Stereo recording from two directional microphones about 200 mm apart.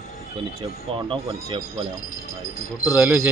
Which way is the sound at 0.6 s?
25° right (ahead or behind).